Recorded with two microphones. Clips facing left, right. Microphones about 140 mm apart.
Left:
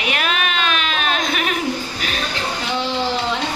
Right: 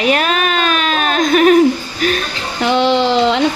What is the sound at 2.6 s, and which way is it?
Speech, 70° right (ahead or behind).